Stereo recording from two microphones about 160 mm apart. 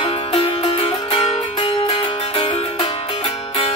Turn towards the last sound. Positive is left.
turn(degrees=35)  # may be behind; listen again after turning